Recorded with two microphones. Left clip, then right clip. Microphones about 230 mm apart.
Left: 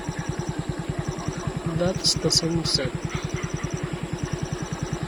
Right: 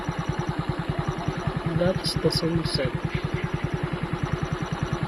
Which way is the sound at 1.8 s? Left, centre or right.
Centre.